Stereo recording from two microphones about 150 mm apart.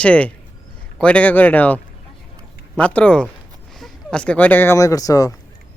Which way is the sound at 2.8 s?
10° left (ahead or behind).